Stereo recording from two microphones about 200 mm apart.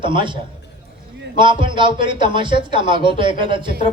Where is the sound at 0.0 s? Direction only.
25° right (ahead or behind).